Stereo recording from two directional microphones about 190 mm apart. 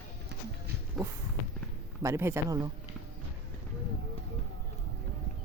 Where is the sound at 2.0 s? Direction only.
15° right (ahead or behind).